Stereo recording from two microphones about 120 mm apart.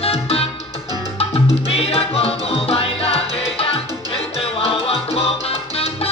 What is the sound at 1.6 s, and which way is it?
Music, 55° left (ahead or behind).